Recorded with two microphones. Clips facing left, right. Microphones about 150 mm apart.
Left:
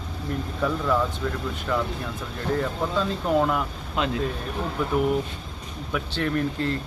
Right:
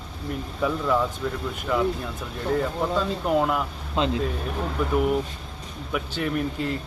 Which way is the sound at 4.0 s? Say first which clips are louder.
Right 2 dB; 25° right (ahead or behind).